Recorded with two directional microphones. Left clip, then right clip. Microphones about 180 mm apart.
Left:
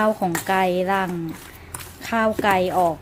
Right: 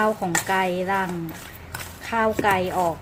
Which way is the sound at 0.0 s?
55° left (ahead or behind).